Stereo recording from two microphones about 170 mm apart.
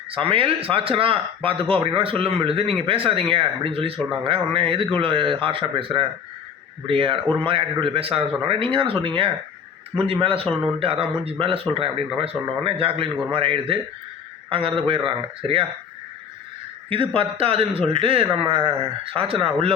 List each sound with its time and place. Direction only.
0.1 s speech: 30° right (ahead or behind)
17.2 s speech: 35° right (ahead or behind)